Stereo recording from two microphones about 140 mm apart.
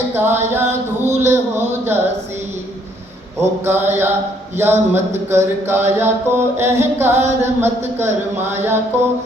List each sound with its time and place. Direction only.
0.1 s mantra: 15° right (ahead or behind)
3.6 s mantra: 15° right (ahead or behind)